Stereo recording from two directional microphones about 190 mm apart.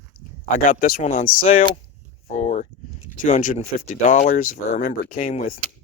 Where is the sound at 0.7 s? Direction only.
50° left (ahead or behind).